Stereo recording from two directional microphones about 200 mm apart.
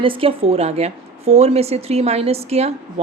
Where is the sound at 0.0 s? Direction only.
25° right (ahead or behind).